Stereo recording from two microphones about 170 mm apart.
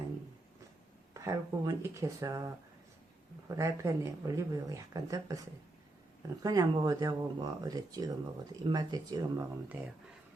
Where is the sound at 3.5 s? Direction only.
20° right (ahead or behind).